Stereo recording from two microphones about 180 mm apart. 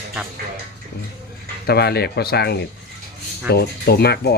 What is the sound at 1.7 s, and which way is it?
Speech, 65° left (ahead or behind).